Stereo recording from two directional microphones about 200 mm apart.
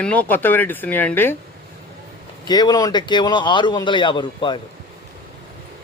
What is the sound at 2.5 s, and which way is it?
Speech, 20° left (ahead or behind).